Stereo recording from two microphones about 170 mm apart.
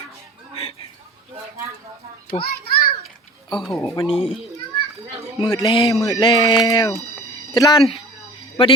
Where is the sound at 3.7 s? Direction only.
20° left (ahead or behind).